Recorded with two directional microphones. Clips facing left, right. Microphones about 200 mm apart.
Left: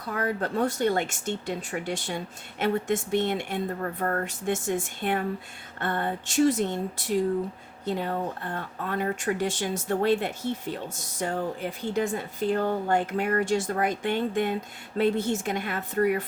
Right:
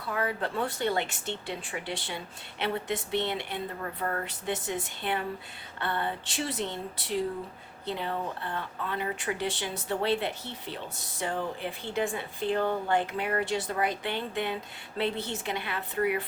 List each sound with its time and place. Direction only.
0.0 s speech: 40° left (ahead or behind)